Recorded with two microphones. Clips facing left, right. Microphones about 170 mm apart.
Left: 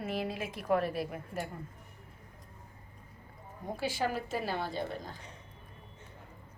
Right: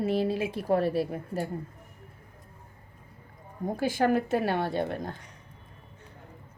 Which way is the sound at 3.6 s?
50° right (ahead or behind).